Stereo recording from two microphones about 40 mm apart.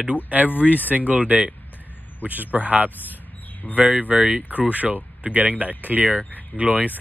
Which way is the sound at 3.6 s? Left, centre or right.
Left.